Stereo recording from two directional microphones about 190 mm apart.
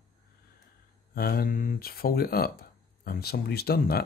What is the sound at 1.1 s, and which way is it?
Speech, 55° left (ahead or behind).